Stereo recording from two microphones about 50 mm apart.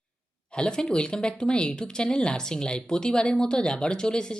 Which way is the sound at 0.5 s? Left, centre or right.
Centre.